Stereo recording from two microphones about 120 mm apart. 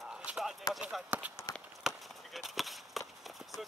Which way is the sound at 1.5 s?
30° left (ahead or behind).